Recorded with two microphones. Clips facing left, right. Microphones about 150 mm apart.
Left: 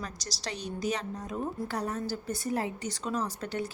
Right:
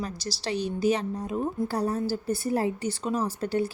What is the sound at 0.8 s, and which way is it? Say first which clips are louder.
A woman's voice: right 6 dB; 30° right (ahead or behind).